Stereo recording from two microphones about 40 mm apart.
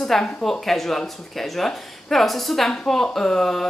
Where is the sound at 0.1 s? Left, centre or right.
Centre.